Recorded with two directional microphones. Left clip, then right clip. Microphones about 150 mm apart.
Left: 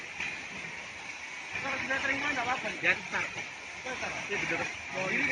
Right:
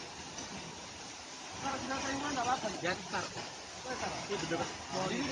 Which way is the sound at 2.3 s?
Centre (ahead or behind).